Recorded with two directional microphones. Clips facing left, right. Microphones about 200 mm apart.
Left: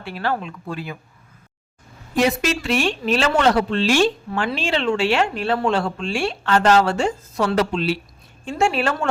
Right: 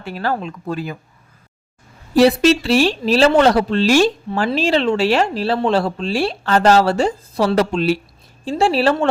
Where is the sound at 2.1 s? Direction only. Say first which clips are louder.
Right 8 dB; 35° right (ahead or behind).